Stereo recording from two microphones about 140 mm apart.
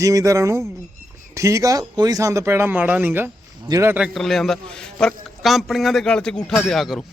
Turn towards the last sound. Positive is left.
turn(degrees=0)  # may be behind; listen again after turning